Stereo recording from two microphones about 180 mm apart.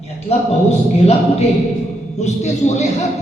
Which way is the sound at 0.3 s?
30° left (ahead or behind).